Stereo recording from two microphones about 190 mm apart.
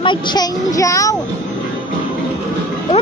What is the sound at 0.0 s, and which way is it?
A child's voice, 25° left (ahead or behind).